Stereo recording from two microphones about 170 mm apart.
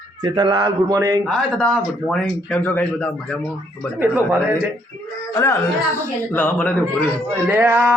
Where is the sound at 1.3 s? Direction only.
5° left (ahead or behind).